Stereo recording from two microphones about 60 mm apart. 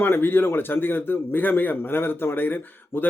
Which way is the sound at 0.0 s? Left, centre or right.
Left.